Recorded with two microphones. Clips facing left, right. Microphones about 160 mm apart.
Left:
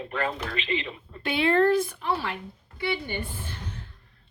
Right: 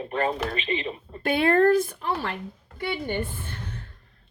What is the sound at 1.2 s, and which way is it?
Speech, 50° right (ahead or behind).